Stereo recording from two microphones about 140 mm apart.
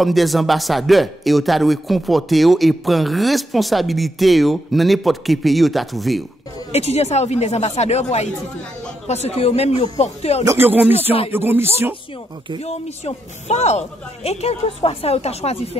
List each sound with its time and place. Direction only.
0.0 s a man's voice: centre (ahead or behind)
6.7 s speech: 50° left (ahead or behind)
10.4 s speech: 20° right (ahead or behind)
12.5 s speech: 50° left (ahead or behind)